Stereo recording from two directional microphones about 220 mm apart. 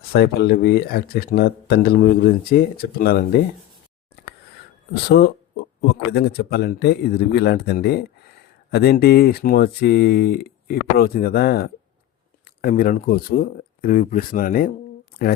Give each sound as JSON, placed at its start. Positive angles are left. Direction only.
{"t": 0.1, "sound": "speech", "side_deg": 45}
{"t": 5.0, "sound": "speech", "side_deg": 45}
{"t": 15.1, "sound": "a sound", "side_deg": 45}